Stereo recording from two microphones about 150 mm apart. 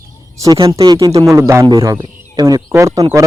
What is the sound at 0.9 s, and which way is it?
A man's voice, 25° right (ahead or behind).